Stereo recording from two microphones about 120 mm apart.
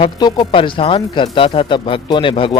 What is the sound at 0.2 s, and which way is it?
Speech, 35° left (ahead or behind).